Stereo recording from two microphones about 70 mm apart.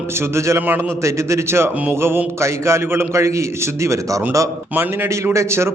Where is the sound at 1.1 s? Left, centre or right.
Right.